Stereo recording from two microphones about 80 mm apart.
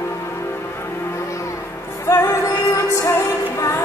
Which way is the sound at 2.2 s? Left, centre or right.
Left.